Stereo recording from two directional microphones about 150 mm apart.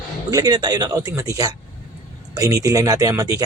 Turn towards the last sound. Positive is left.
turn(degrees=-25)  # may be behind; listen again after turning